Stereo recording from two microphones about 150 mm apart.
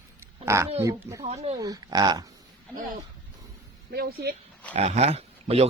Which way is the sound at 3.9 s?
90° right.